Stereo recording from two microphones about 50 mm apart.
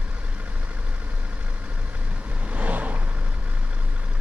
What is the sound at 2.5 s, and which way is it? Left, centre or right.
Vehicle, right.